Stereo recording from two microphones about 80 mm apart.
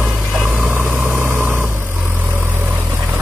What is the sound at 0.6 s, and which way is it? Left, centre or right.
Vehicle, right.